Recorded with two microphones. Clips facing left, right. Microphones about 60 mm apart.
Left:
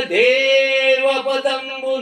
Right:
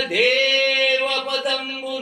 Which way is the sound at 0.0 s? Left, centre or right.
Centre.